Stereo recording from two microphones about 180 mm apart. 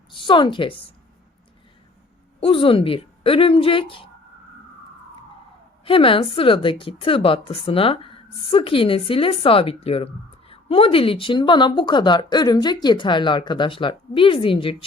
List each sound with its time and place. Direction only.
0.1 s speech: 25° left (ahead or behind)
2.4 s a woman's voice: 30° left (ahead or behind)
5.8 s a woman's voice: 30° left (ahead or behind)